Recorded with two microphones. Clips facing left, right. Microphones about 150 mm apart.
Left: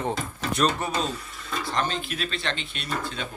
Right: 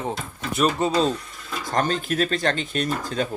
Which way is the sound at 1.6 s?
45° right (ahead or behind).